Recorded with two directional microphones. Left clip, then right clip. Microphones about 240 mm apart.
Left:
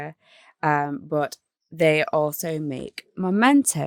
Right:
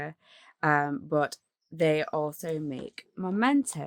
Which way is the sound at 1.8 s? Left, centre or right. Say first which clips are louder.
Left 7 dB; left.